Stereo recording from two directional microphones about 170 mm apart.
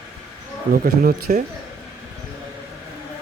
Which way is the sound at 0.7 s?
60° right (ahead or behind).